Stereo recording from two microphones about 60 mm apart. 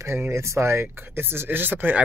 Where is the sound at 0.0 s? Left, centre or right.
Right.